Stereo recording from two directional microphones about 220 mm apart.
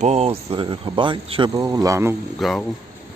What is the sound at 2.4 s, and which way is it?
Speech, centre (ahead or behind).